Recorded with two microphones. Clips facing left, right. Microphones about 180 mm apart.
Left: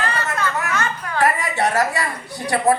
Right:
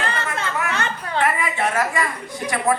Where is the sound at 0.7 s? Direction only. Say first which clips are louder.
Left 1 dB; 30° right (ahead or behind).